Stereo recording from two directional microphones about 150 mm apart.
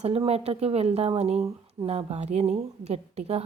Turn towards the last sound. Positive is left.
turn(degrees=-45)  # may be behind; listen again after turning